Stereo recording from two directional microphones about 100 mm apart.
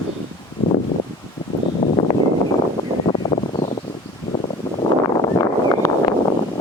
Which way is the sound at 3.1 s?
75° left (ahead or behind).